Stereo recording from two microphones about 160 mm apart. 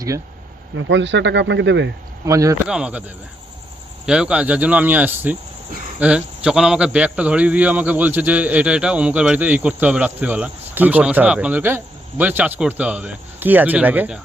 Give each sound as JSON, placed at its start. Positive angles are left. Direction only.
{"t": 1.3, "sound": "speech", "side_deg": -90}
{"t": 2.2, "sound": "speech", "side_deg": -20}
{"t": 2.6, "sound": "a man's voice", "side_deg": -5}
{"t": 4.0, "sound": "a man's voice", "side_deg": -5}